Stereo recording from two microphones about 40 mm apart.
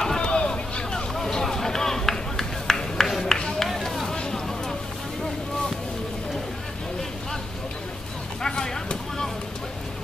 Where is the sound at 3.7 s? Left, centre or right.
Centre.